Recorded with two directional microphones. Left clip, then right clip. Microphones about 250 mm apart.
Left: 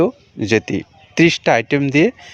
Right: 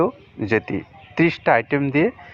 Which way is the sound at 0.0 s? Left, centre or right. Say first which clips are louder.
Left 4 dB; left.